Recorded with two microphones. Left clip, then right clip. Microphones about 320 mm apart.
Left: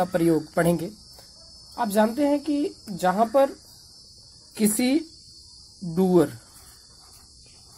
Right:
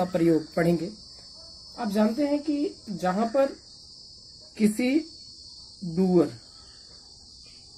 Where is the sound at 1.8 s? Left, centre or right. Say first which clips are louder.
Left 4 dB; left.